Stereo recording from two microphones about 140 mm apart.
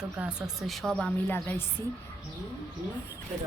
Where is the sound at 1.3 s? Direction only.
15° left (ahead or behind).